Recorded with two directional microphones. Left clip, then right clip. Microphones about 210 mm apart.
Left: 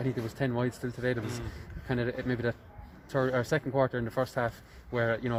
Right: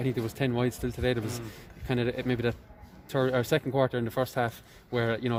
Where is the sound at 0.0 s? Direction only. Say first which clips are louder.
Right 2 dB; 50° right (ahead or behind).